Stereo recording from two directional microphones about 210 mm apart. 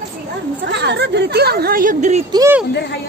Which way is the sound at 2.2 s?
20° right (ahead or behind).